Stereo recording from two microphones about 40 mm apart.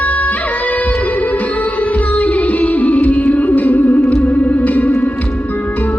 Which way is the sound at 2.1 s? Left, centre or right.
Left.